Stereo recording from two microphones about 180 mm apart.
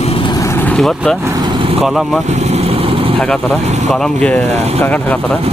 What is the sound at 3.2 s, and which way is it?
Speech, 5° left (ahead or behind).